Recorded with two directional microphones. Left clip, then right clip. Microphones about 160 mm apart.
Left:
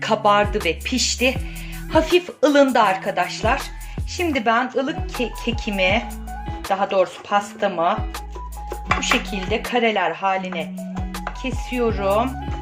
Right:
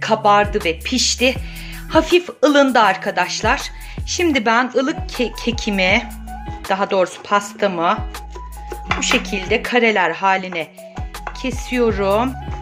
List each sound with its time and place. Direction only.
0.0 s speech: 20° right (ahead or behind); by 7.9 s 45° right (ahead or behind)
9.1 s speech: 35° right (ahead or behind)